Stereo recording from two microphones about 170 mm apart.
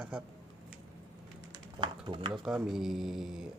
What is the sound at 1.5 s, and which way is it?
Typing, 30° right (ahead or behind).